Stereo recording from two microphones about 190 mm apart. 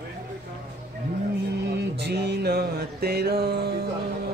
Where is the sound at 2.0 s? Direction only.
60° right (ahead or behind).